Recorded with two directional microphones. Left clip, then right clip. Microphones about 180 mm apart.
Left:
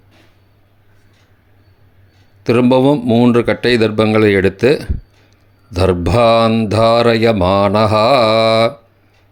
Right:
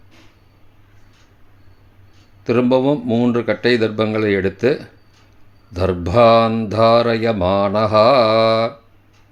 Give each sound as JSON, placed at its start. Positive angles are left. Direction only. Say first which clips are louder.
{"t": 2.4, "sound": "mantra", "louder": "left 4 dB", "side_deg": 30}